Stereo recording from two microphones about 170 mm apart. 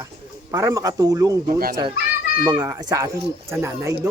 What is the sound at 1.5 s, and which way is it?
Speech, 60° right (ahead or behind).